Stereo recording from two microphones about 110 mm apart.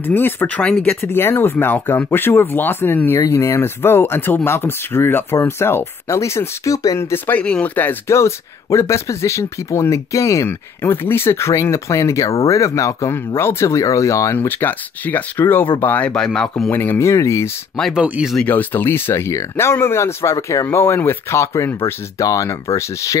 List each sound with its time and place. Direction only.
0.0 s speech: 20° left (ahead or behind)
16.7 s speech: 20° left (ahead or behind)
17.9 s speech: 10° right (ahead or behind)
18.3 s speech: 10° left (ahead or behind); by 23.1 s 30° left (ahead or behind)